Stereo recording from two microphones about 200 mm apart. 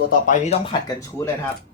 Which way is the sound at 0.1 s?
40° left (ahead or behind).